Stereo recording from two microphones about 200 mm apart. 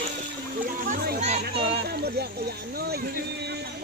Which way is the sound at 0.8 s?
35° right (ahead or behind).